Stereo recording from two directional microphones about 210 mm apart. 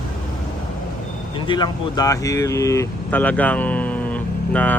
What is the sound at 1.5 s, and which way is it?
Speech, 20° left (ahead or behind).